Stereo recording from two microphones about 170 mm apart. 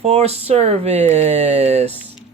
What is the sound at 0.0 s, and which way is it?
Speech, 40° right (ahead or behind).